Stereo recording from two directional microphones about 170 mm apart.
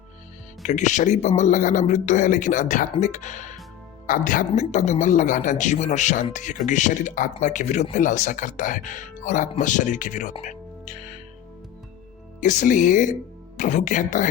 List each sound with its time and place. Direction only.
0.6 s speech: 45° left (ahead or behind)
10.3 s music: 45° left (ahead or behind)
12.4 s speech: 45° left (ahead or behind)